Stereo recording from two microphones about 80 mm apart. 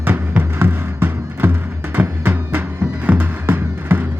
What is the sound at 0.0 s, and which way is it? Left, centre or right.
Music, right.